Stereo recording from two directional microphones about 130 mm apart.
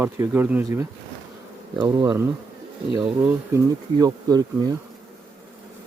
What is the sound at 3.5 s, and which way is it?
Speech, 25° right (ahead or behind).